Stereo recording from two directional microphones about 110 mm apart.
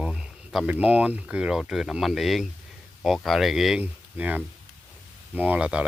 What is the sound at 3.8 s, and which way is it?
Speech, 15° right (ahead or behind).